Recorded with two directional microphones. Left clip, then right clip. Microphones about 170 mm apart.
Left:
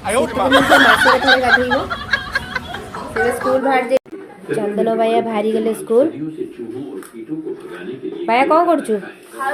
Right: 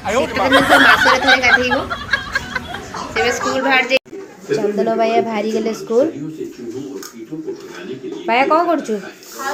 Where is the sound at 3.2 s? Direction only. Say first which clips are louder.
Left 2 dB; 35° left (ahead or behind).